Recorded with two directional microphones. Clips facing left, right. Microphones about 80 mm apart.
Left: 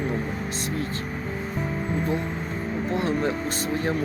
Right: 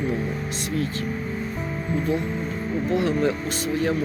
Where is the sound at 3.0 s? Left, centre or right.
Left.